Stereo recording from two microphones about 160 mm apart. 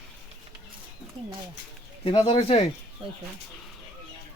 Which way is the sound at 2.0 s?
35° left (ahead or behind).